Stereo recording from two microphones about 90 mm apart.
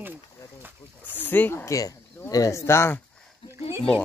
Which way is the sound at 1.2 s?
20° left (ahead or behind).